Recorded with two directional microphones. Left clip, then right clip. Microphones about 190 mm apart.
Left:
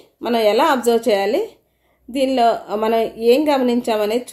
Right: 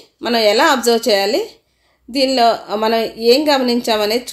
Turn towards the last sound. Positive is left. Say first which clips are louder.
# right 2 dB
turn(degrees=-30)  # may be behind; listen again after turning